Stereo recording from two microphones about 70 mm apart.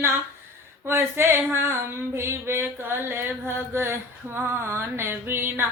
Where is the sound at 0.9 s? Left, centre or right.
Right.